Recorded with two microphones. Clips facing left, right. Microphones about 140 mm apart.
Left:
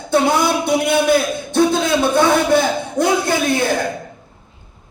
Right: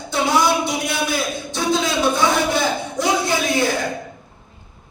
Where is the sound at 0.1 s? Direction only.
55° left (ahead or behind).